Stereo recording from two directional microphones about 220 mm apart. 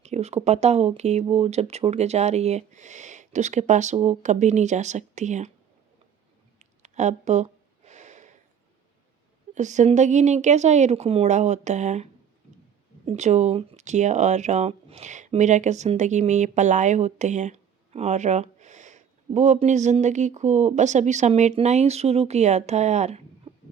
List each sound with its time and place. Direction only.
0.0 s speech: 30° right (ahead or behind)
6.6 s a sound: 30° right (ahead or behind)
9.6 s speech: 35° right (ahead or behind)
13.1 s speech: 30° right (ahead or behind)